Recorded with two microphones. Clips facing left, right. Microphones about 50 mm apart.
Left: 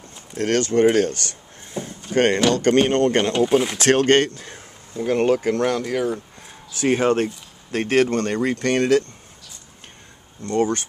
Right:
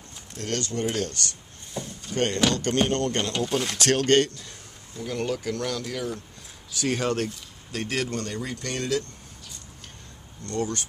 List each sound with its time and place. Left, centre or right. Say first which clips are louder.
0.4 s speech: left 11 dB; left
1.7 s a sound: left 5 dB; left
2.1 s speech: left 7 dB; left; by 3.7 s centre
3.7 s speech: left 5 dB; left
7.7 s speech: left 10 dB; left
10.4 s speech: left 8 dB; left